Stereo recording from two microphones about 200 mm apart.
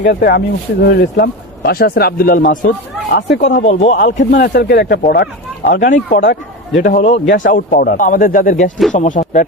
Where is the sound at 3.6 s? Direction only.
35° left (ahead or behind).